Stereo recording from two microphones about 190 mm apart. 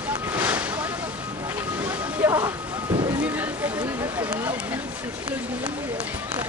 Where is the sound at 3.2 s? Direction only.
5° right (ahead or behind).